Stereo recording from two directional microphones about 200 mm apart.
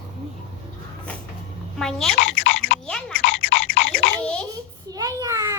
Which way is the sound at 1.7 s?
Centre (ahead or behind).